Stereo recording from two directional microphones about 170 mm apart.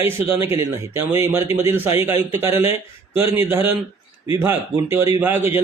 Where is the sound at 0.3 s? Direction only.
15° right (ahead or behind).